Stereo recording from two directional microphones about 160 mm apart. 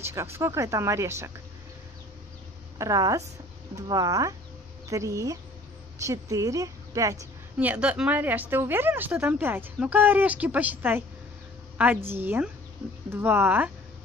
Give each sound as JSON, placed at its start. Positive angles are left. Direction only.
{"t": 0.0, "sound": "a woman's voice", "side_deg": -15}
{"t": 2.8, "sound": "a woman's voice", "side_deg": -20}
{"t": 7.5, "sound": "a woman's voice", "side_deg": -10}